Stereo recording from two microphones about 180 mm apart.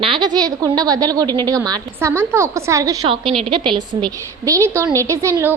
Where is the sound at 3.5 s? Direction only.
25° right (ahead or behind).